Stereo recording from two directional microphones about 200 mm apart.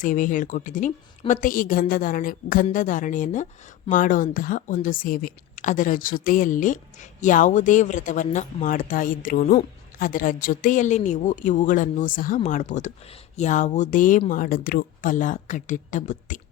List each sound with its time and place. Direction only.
0.0 s a woman's voice: 40° left (ahead or behind)